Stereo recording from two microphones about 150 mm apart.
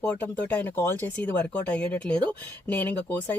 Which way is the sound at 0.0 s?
10° left (ahead or behind).